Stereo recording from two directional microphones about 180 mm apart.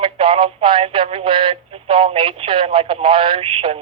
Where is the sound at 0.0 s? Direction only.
30° right (ahead or behind).